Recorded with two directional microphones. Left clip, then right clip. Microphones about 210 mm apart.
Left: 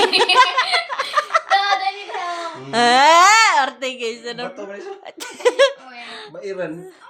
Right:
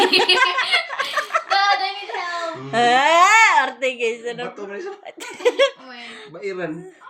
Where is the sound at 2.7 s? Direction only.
25° left (ahead or behind).